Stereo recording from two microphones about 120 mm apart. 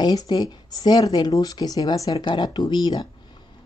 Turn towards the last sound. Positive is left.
turn(degrees=35)  # may be behind; listen again after turning